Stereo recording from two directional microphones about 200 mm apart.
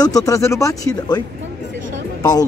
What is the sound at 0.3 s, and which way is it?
Speech, 15° left (ahead or behind).